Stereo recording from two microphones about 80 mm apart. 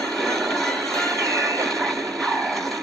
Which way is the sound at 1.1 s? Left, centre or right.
Right.